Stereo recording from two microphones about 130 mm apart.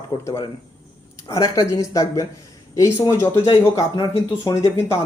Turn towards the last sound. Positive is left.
turn(degrees=20)  # may be behind; listen again after turning